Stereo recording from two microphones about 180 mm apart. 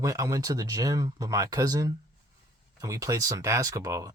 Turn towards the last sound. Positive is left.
turn(degrees=-15)  # may be behind; listen again after turning